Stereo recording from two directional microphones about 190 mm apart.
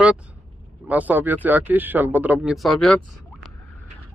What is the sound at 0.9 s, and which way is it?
Speech, 10° right (ahead or behind).